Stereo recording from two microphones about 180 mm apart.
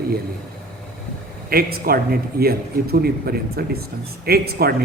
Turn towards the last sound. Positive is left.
turn(degrees=-60)  # may be behind; listen again after turning